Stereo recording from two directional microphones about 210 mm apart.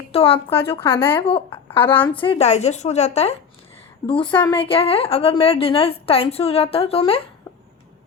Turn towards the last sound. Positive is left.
turn(degrees=25)  # may be behind; listen again after turning